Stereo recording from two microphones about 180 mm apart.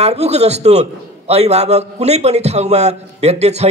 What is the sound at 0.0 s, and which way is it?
A man's voice, 35° right (ahead or behind).